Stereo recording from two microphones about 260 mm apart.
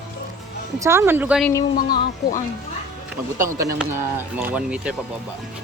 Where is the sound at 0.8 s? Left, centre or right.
Centre.